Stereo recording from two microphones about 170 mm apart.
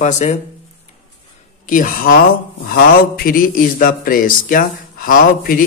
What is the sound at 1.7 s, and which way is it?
Speech, 55° left (ahead or behind).